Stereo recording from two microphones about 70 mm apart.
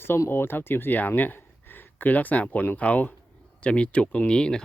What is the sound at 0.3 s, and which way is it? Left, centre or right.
Speech, left.